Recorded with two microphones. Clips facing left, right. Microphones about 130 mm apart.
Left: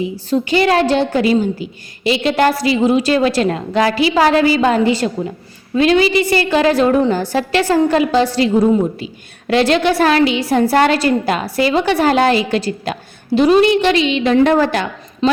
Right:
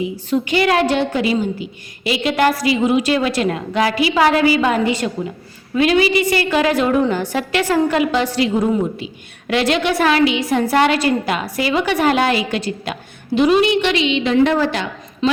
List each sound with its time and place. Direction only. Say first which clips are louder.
0.3 s a woman's voice: left 2 dB; 35° left (ahead or behind); by 14.8 s 50° left (ahead or behind)
15.2 s a woman's voice: left 3 dB; 35° left (ahead or behind)